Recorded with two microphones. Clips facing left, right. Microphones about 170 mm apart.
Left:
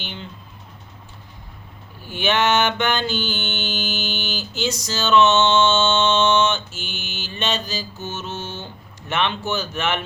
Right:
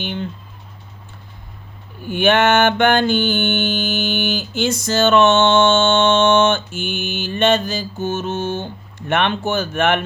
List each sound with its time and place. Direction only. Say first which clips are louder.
0.0 s mantra: right 9 dB; 50° right (ahead or behind)
2.0 s mantra: right 5 dB; 55° right (ahead or behind)